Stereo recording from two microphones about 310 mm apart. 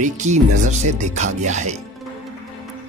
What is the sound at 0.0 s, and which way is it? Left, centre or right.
Speech, right.